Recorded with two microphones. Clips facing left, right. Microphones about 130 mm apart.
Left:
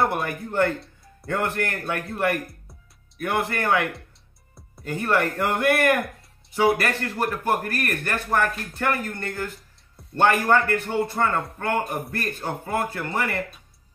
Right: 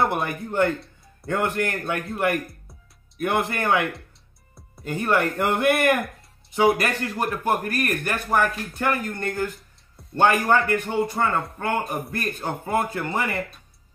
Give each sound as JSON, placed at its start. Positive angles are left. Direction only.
{"t": 0.1, "sound": "speech", "side_deg": -20}
{"t": 4.8, "sound": "speech", "side_deg": -20}